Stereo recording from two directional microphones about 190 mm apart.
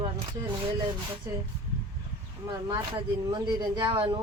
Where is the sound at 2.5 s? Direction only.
20° right (ahead or behind).